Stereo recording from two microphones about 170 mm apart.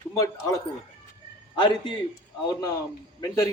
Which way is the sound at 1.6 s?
25° left (ahead or behind).